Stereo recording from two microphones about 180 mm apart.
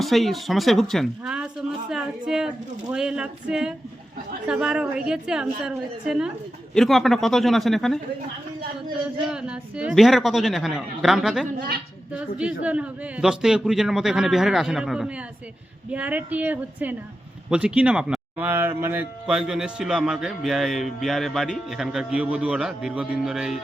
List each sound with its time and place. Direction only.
0.0 s speech: centre (ahead or behind)
9.3 s speech: 5° right (ahead or behind)
11.4 s a woman's voice: 60° right (ahead or behind)
12.1 s speech: 5° right (ahead or behind)